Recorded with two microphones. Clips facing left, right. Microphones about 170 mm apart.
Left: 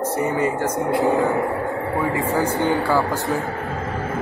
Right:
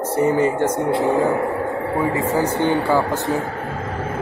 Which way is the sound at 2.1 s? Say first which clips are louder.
Right 1 dB; 20° right (ahead or behind).